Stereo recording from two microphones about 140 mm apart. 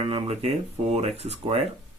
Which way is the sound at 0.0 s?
45° right (ahead or behind).